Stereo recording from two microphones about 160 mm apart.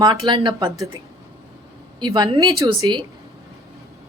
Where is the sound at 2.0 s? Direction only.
25° right (ahead or behind).